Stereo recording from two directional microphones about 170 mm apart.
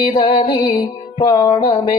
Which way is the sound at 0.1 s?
30° left (ahead or behind).